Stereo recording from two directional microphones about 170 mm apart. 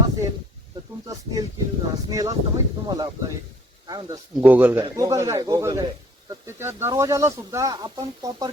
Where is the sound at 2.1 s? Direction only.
20° right (ahead or behind).